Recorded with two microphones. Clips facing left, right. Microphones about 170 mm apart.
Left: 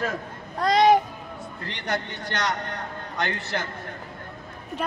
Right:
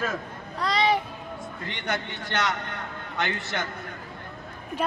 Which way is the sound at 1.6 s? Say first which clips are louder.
Left 2 dB; 35° left (ahead or behind).